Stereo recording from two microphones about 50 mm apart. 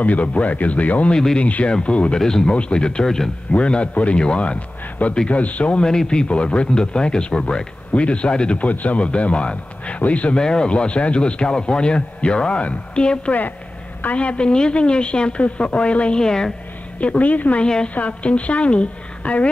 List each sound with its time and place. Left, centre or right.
0.0 s a man's voice: left
1.1 s a woman's voice: centre
2.1 s a woman's voice: centre
17.0 s a man's voice: left
17.6 s a woman's voice: centre